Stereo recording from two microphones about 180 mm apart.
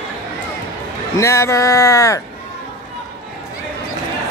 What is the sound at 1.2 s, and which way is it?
A man's voice, 15° left (ahead or behind).